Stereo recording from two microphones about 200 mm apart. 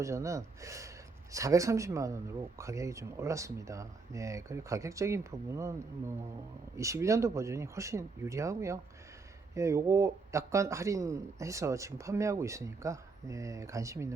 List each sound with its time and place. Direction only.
0.0 s a man's voice: 15° right (ahead or behind)
6.7 s a man's voice: 15° right (ahead or behind)